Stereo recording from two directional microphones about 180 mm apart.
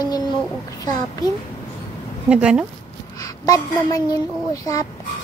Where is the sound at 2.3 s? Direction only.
5° right (ahead or behind).